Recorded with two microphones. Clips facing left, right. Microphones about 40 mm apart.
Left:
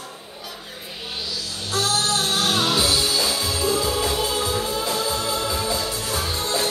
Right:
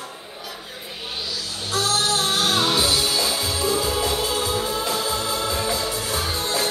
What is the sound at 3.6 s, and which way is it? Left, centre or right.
Music, centre.